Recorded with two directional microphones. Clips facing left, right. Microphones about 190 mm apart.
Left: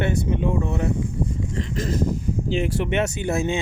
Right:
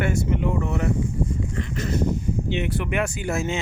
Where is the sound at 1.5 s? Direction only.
35° left (ahead or behind).